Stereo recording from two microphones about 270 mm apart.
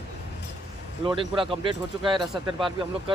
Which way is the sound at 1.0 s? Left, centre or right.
Centre.